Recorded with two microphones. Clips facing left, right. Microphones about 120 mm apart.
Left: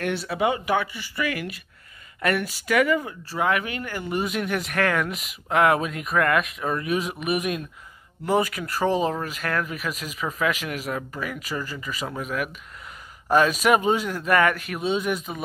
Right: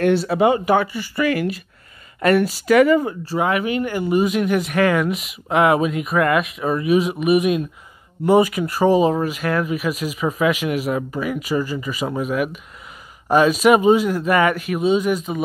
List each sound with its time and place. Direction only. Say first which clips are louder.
0.0 s speech: right 8 dB; 35° right (ahead or behind)
3.4 s speech: right 4 dB; 10° right (ahead or behind)